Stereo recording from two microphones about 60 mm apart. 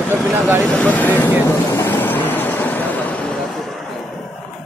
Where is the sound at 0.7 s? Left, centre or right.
Left.